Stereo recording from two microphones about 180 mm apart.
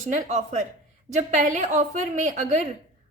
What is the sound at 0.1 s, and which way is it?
A woman's voice, 40° right (ahead or behind).